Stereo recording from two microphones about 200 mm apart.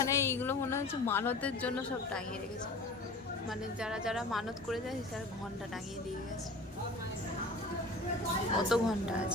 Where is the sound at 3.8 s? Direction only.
5° right (ahead or behind).